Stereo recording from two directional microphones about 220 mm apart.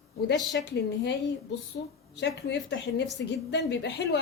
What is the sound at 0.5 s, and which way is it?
Speech, 55° left (ahead or behind).